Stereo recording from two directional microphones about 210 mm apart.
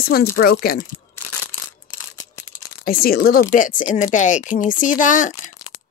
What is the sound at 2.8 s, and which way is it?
Speech, 45° left (ahead or behind).